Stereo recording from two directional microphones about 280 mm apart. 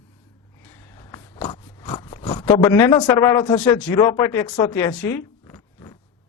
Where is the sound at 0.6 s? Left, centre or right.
Centre.